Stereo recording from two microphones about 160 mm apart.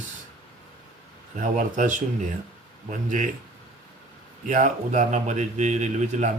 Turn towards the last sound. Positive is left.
turn(degrees=-50)  # may be behind; listen again after turning